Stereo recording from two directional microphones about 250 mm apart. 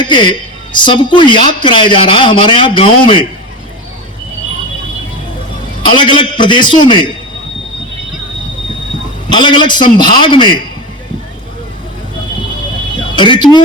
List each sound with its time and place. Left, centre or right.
0.0 s a woman's voice: centre
5.8 s a woman's voice: centre
9.3 s a man's voice: centre
13.1 s a man's voice: centre